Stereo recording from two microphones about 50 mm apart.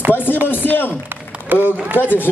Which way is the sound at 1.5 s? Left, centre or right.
Right.